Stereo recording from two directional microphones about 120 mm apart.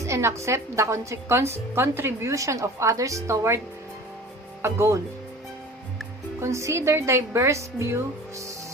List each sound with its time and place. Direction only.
0.0 s a woman's voice: 25° right (ahead or behind)
4.6 s a woman's voice: 20° right (ahead or behind)
6.4 s a woman's voice: 25° right (ahead or behind)